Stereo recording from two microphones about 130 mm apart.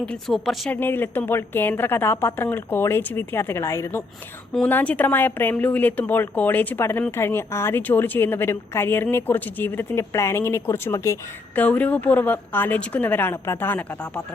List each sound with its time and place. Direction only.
0.0 s a woman's voice: 5° left (ahead or behind)
0.7 s speech: 15° left (ahead or behind)